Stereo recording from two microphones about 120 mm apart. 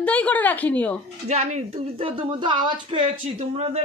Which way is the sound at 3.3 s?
65° right (ahead or behind).